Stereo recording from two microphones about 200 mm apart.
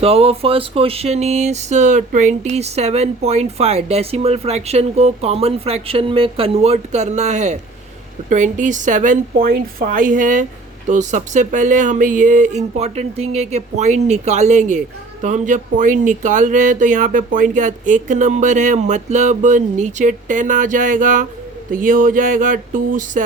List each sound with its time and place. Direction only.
0.0 s speech: 30° right (ahead or behind)